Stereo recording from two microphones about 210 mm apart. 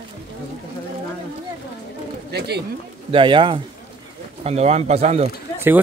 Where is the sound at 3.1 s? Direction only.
25° right (ahead or behind).